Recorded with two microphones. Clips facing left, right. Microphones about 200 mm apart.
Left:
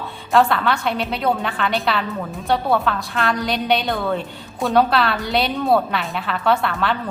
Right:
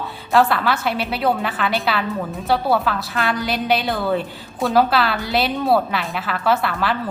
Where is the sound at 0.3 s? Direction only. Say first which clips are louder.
Even; 5° right (ahead or behind).